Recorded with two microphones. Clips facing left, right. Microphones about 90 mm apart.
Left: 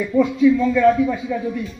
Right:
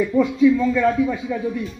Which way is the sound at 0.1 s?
25° right (ahead or behind).